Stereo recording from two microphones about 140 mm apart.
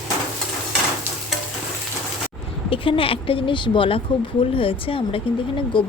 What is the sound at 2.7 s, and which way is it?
A woman's voice, 40° left (ahead or behind).